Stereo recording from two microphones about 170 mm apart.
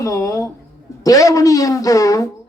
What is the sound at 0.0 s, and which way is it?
A man's voice, 20° left (ahead or behind).